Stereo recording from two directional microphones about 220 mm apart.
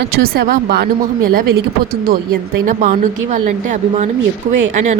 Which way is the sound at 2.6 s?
35° right (ahead or behind).